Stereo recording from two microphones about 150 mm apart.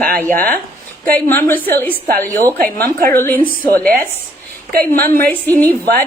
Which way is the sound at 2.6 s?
75° right (ahead or behind).